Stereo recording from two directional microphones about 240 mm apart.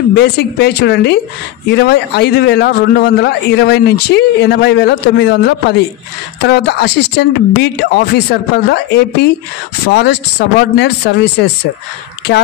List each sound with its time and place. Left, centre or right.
0.1 s a man's voice: left